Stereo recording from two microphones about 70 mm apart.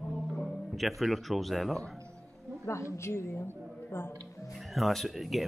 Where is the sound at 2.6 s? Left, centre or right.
Left.